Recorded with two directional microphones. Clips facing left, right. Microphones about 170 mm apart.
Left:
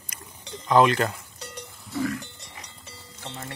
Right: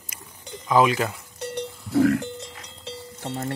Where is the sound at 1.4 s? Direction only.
60° right (ahead or behind); by 2.3 s 75° right (ahead or behind).